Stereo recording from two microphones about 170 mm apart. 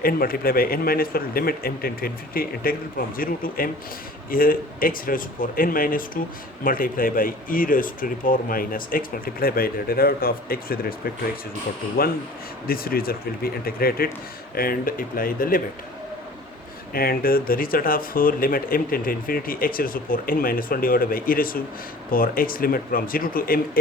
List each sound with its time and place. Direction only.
0.0 s speech: 60° left (ahead or behind)
16.9 s speech: 60° left (ahead or behind)